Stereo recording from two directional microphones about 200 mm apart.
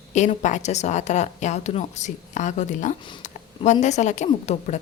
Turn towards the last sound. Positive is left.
turn(degrees=35)  # may be behind; listen again after turning